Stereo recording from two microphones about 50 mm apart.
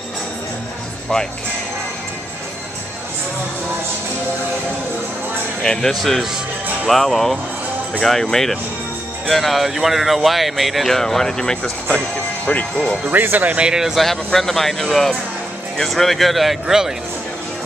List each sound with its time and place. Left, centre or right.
1.1 s speech: centre
5.6 s speech: centre
12.7 s speech: centre
13.1 s speech: right
13.6 s speech: centre
13.9 s speech: centre